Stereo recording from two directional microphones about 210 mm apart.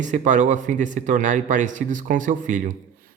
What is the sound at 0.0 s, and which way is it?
A man's voice, 35° right (ahead or behind).